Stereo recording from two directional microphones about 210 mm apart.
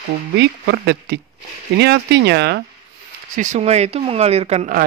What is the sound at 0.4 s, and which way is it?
Speech, 55° right (ahead or behind).